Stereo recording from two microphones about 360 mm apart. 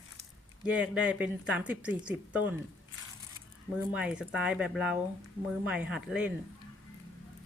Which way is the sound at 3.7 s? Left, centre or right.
Centre.